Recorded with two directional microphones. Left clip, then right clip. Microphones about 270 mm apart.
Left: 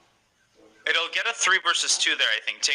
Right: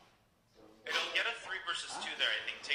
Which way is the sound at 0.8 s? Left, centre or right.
Left.